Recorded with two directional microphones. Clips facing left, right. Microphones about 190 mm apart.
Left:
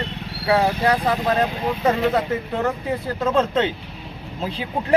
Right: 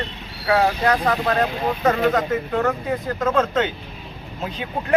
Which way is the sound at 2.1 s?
10° left (ahead or behind).